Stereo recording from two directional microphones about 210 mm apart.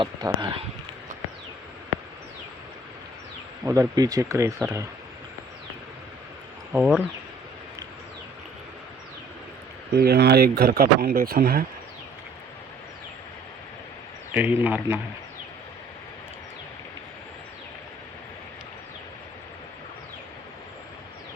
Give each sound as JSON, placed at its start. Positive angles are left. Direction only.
{"t": 0.0, "sound": "speech", "side_deg": -20}
{"t": 3.6, "sound": "speech", "side_deg": -15}
{"t": 6.7, "sound": "speech", "side_deg": -5}
{"t": 9.9, "sound": "speech", "side_deg": -50}
{"t": 14.3, "sound": "speech", "side_deg": -10}